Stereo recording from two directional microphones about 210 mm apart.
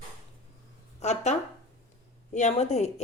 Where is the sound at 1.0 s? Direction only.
30° left (ahead or behind).